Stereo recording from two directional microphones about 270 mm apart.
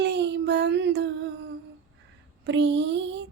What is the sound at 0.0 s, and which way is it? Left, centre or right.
Child singing, right.